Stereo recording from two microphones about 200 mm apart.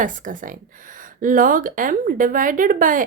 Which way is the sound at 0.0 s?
40° right (ahead or behind).